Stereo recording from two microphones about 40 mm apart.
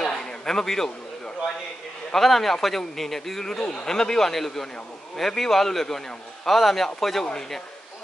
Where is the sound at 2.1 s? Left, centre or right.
Centre.